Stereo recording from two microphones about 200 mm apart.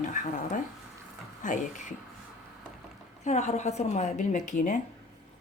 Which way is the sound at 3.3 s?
35° left (ahead or behind).